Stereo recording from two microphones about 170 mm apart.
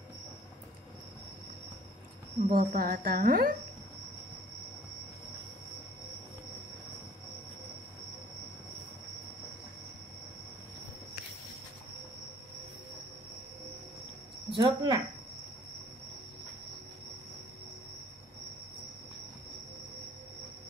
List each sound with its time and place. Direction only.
2.4 s a woman's voice: 55° right (ahead or behind)
14.5 s speech: 30° right (ahead or behind)